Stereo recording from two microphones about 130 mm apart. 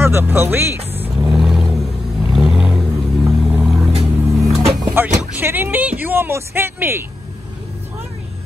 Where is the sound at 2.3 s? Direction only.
5° right (ahead or behind).